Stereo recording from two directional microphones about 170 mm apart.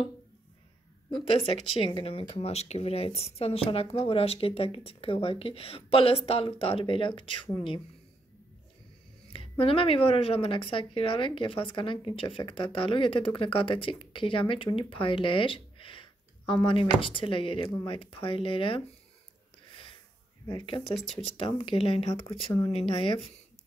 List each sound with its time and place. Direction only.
1.4 s speech: 35° left (ahead or behind)
9.3 s speech: 35° left (ahead or behind)
20.4 s speech: 30° left (ahead or behind)